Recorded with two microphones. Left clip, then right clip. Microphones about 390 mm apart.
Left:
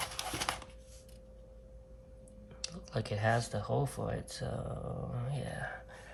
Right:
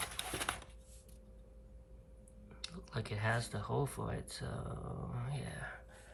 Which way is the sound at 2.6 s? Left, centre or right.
Centre.